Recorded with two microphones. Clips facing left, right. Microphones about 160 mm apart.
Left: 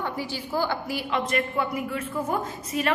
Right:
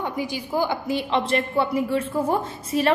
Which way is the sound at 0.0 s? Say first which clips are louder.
Right 3 dB; 15° right (ahead or behind).